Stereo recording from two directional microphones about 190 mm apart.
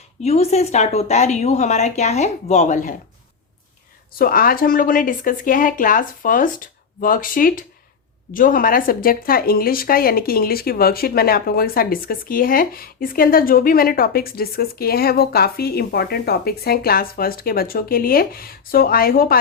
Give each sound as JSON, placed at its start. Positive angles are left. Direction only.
{"t": 0.2, "sound": "speech", "side_deg": 35}
{"t": 4.2, "sound": "speech", "side_deg": 50}